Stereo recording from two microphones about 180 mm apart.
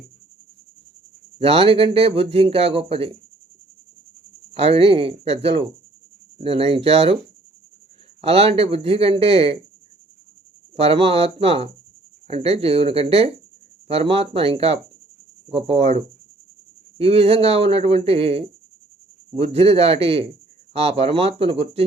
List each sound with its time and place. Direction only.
1.4 s a man's voice: 30° right (ahead or behind)
4.5 s a man's voice: 35° right (ahead or behind)
8.2 s a man's voice: 35° right (ahead or behind)
10.8 s a man's voice: 30° right (ahead or behind)